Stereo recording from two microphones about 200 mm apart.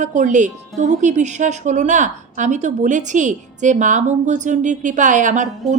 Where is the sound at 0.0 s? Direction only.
40° right (ahead or behind).